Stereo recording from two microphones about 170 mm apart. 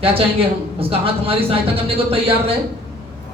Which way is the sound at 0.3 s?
35° right (ahead or behind).